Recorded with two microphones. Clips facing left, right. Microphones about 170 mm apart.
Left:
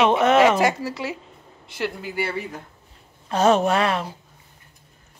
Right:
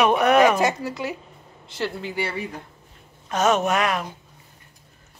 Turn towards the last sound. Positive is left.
turn(degrees=30)  # may be behind; listen again after turning